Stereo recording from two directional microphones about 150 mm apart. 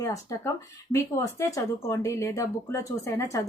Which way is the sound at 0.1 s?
20° left (ahead or behind).